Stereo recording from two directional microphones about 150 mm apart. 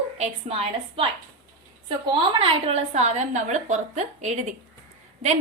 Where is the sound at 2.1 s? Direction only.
35° right (ahead or behind).